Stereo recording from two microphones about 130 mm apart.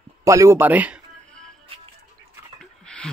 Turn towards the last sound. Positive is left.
turn(degrees=5)  # may be behind; listen again after turning